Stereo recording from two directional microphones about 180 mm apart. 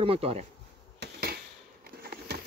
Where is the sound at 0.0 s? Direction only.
30° right (ahead or behind).